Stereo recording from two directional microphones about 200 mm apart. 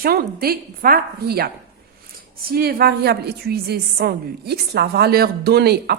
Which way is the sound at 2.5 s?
50° right (ahead or behind).